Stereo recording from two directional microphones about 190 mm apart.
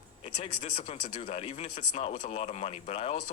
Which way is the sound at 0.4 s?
30° left (ahead or behind).